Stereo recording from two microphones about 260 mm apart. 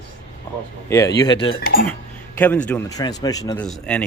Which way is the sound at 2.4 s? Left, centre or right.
Centre.